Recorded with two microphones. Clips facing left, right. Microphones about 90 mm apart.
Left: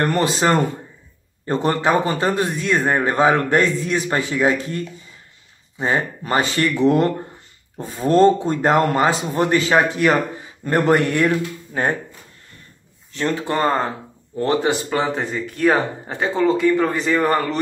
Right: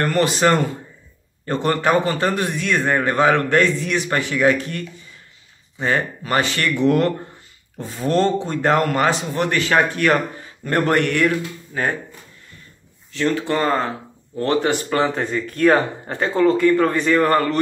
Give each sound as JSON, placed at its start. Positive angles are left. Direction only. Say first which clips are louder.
{"t": 0.2, "sound": "a man's voice", "louder": "right 4 dB", "side_deg": 20}
{"t": 13.2, "sound": "a man's voice", "louder": "even", "side_deg": 25}